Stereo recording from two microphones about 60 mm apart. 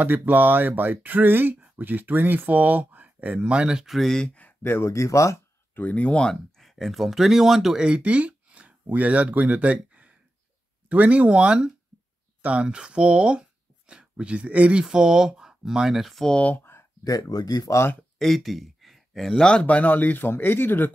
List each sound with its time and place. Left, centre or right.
0.0 s speech: right
3.3 s speech: centre
3.9 s speech: centre
4.6 s speech: left
5.8 s speech: left
6.6 s speech: centre
16.3 s speech: centre
16.5 s a sound: left
17.0 s speech: left
18.2 s speech: centre
19.6 s speech: left